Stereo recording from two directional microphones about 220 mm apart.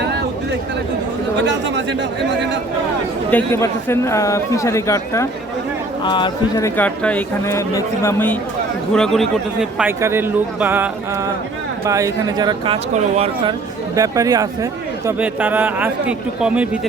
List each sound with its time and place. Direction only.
1.5 s speech: 55° right (ahead or behind)
3.2 s a man's voice: 10° left (ahead or behind); by 13.3 s 25° right (ahead or behind)
13.9 s speech: 15° right (ahead or behind)